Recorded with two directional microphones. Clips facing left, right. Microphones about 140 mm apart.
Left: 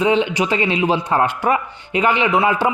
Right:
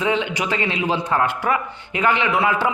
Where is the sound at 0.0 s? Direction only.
20° left (ahead or behind).